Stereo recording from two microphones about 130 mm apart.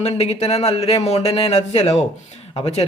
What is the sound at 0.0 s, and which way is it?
A man's voice, 55° left (ahead or behind).